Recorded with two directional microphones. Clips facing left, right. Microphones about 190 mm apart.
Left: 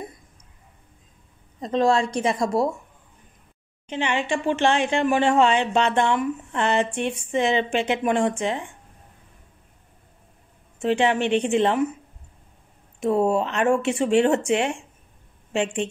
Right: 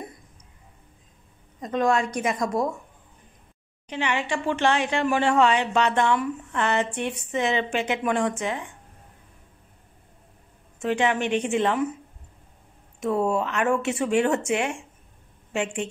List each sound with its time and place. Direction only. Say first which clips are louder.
1.6 s speech: left 3 dB; 30° left (ahead or behind)
3.8 s speech: left 2 dB; 25° left (ahead or behind)
10.8 s speech: left 3 dB; 30° left (ahead or behind)
13.0 s speech: left 3 dB; 25° left (ahead or behind)